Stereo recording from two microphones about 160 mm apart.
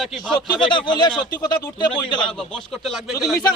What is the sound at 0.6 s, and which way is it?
Speech, 30° left (ahead or behind).